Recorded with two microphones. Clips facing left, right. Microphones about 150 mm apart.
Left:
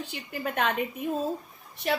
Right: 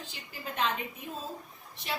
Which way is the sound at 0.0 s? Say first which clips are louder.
Left 9 dB; 65° left (ahead or behind).